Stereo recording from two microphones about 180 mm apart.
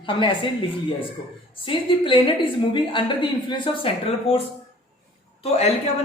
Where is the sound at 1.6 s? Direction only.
30° left (ahead or behind).